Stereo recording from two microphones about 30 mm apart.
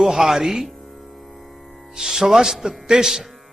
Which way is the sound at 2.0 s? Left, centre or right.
Centre.